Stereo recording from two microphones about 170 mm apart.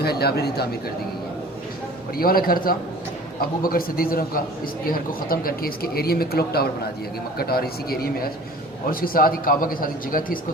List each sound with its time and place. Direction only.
0.0 s speech: 70° left (ahead or behind)
2.1 s speech: 60° left (ahead or behind)